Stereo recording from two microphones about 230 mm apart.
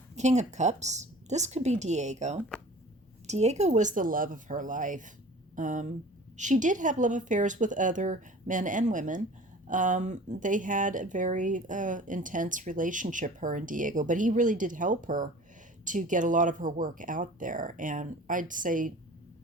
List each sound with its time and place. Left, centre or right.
0.2 s speech: right